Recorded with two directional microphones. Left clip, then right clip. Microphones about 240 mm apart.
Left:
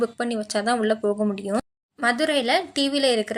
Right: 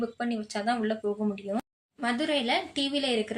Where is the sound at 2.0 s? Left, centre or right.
Left.